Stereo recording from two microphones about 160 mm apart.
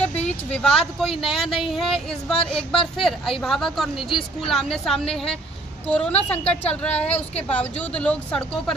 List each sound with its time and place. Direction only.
0.5 s speech: 5° left (ahead or behind)